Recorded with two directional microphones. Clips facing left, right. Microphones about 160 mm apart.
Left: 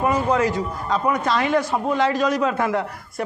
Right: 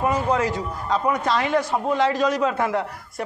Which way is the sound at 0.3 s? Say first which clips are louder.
Left 2 dB; 25° right (ahead or behind).